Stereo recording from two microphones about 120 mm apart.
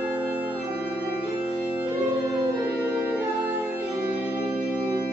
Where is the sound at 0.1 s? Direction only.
15° right (ahead or behind).